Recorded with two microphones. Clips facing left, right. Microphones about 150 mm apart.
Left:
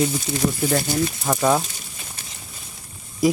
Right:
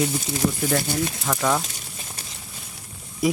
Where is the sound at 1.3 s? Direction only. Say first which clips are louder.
Left 5 dB; 20° left (ahead or behind).